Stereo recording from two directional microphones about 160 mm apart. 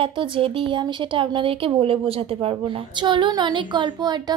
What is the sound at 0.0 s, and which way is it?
Speech, 35° right (ahead or behind).